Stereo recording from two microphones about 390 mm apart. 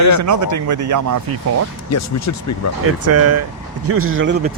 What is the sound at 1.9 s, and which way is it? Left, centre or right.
Speech, left.